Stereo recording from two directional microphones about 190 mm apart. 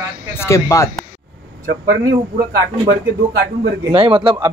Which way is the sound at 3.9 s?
30° right (ahead or behind).